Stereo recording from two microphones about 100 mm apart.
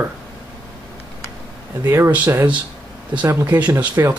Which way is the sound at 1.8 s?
25° right (ahead or behind).